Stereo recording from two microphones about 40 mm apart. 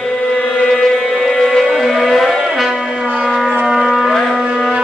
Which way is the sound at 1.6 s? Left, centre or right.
Centre.